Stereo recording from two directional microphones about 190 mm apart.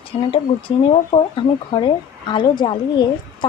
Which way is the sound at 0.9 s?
25° left (ahead or behind).